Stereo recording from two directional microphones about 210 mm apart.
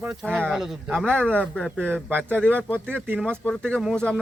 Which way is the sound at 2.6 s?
5° left (ahead or behind).